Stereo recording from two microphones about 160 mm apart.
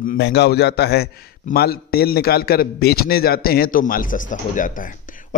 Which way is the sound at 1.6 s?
75° left (ahead or behind).